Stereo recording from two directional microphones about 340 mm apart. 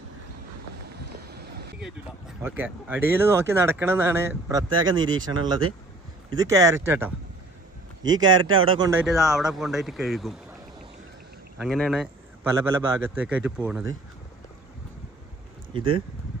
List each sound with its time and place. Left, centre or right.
1.3 s a sound: right
2.4 s speech: centre
4.9 s speech: right
5.2 s speech: centre
8.1 s a man's voice: centre
11.6 s a man's voice: centre
15.7 s speech: centre